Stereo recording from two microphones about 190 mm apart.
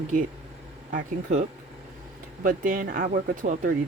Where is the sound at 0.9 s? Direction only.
40° right (ahead or behind).